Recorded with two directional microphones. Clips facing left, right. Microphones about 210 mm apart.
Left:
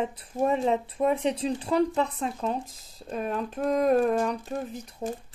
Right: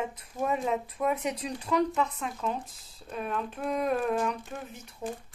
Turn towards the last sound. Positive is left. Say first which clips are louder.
# left 6 dB
turn(degrees=35)  # may be behind; listen again after turning